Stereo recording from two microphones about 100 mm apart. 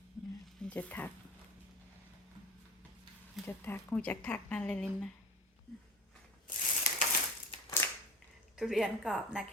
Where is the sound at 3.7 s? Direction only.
15° left (ahead or behind).